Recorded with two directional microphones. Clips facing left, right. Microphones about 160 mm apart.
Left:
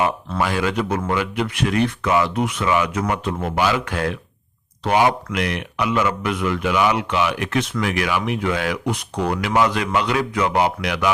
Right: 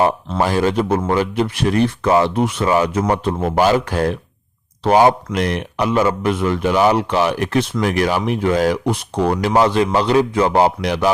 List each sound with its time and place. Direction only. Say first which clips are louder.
0.3 s speech: right 4 dB; 35° right (ahead or behind)